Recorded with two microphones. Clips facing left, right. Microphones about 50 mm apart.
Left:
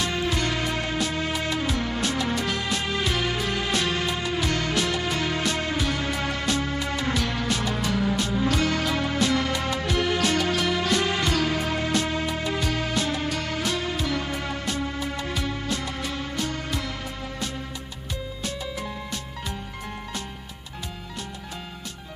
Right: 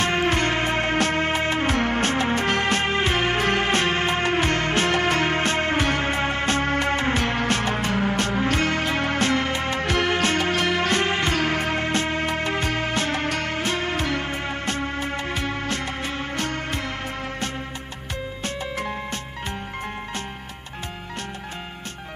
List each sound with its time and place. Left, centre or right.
0.0 s music: right